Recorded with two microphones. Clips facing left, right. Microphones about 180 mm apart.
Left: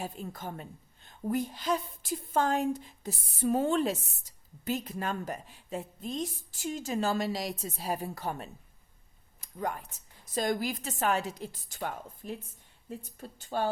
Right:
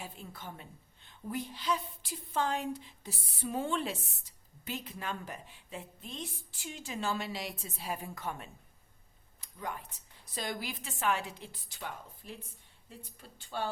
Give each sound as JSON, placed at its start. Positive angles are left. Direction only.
{"t": 0.0, "sound": "a woman's voice", "side_deg": 45}
{"t": 9.4, "sound": "a sound", "side_deg": 45}
{"t": 10.3, "sound": "a woman's voice", "side_deg": 45}